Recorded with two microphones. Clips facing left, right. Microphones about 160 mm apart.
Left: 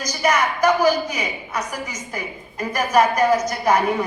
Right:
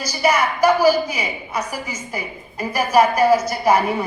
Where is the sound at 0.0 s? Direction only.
10° right (ahead or behind).